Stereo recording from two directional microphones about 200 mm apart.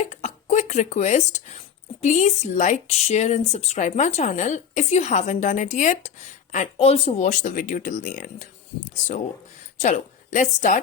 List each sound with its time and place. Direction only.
0.0 s a sound: 35° left (ahead or behind)
2.0 s speech: 35° left (ahead or behind)
9.8 s a woman's voice: 35° left (ahead or behind)